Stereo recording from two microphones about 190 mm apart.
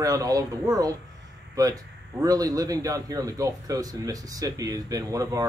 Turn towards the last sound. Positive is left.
turn(degrees=-20)  # may be behind; listen again after turning